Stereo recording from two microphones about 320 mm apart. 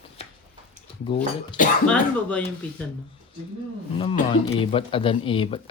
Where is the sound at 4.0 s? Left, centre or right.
Centre.